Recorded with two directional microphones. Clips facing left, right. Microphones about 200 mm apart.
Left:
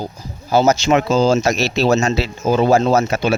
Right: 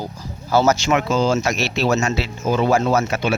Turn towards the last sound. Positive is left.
turn(degrees=45)  # may be behind; listen again after turning